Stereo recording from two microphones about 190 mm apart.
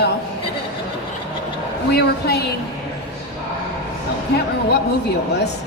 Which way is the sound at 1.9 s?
60° left (ahead or behind).